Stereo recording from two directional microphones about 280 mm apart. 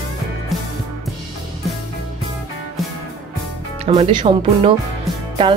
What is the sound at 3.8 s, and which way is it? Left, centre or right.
Speech, centre.